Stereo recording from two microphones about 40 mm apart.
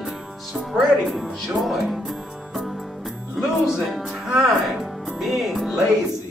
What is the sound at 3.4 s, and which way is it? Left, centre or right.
Speech, centre.